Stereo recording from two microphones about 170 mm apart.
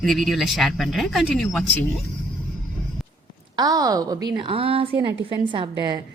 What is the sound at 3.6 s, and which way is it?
A woman's voice, 20° right (ahead or behind).